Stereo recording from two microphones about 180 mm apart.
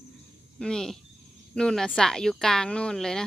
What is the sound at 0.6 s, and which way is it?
Speech, 5° left (ahead or behind).